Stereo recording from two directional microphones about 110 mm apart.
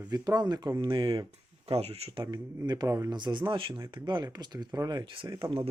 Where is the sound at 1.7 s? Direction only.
65° right (ahead or behind).